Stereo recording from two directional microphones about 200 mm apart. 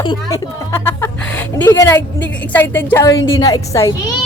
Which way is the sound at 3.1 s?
75° left (ahead or behind).